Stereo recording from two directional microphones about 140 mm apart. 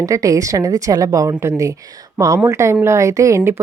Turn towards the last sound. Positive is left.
turn(degrees=-20)  # may be behind; listen again after turning